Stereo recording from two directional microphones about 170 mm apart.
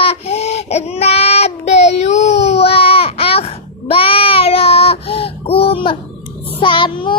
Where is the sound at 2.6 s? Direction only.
35° left (ahead or behind).